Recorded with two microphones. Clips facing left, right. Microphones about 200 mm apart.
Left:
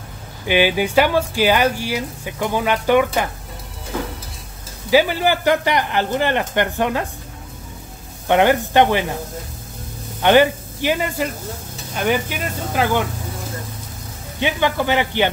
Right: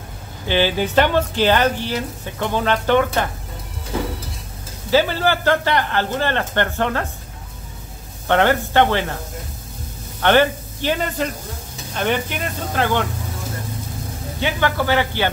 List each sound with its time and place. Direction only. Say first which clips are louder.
0.5 s speech: left 2 dB; 10° left (ahead or behind)
4.9 s speech: left 1 dB; 15° left (ahead or behind)
8.3 s speech: left 2 dB; 15° left (ahead or behind)
10.2 s speech: left 2 dB; 15° left (ahead or behind)
14.4 s speech: left 1 dB; 15° left (ahead or behind)